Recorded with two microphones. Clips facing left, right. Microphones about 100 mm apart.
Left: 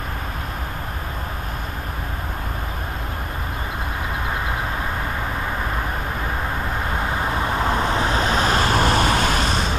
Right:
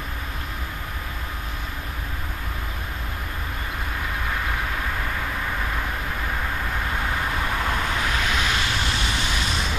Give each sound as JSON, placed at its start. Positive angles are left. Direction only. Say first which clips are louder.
{"t": 7.1, "sound": "vehicle", "louder": "left 3 dB", "side_deg": 25}